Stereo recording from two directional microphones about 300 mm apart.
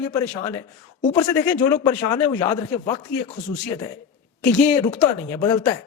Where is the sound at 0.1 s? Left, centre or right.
Centre.